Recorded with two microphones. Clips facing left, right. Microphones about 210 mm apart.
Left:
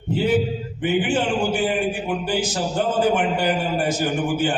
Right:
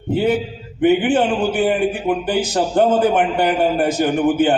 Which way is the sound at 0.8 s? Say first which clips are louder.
Right 7 dB; 60° right (ahead or behind).